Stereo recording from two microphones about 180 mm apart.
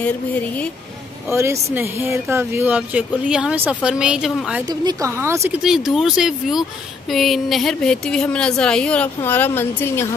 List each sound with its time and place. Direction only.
1.3 s speech: 15° right (ahead or behind)
4.6 s speech: 20° right (ahead or behind)
5.6 s a woman's voice: centre (ahead or behind)